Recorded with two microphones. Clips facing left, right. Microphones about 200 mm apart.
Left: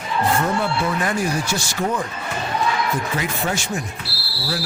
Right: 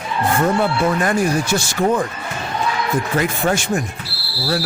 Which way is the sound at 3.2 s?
55° right (ahead or behind).